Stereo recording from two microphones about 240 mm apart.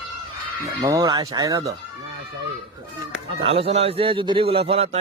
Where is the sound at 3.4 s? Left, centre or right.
Right.